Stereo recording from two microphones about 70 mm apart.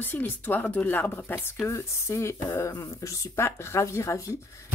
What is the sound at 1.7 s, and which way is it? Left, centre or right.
Speech, left.